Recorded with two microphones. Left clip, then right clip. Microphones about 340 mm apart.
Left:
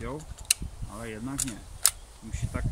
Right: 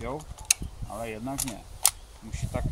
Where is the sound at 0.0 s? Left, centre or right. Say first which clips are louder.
Right 3 dB; centre.